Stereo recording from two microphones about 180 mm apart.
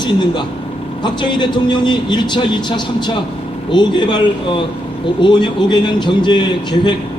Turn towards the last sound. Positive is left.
turn(degrees=25)  # may be behind; listen again after turning